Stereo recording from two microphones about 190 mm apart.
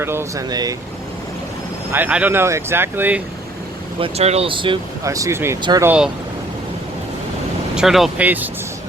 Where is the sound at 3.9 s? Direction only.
30° right (ahead or behind).